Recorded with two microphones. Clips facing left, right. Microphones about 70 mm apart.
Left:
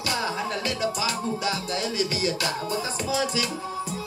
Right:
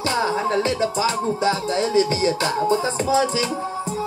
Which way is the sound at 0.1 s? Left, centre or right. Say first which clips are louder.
Right 7 dB; right.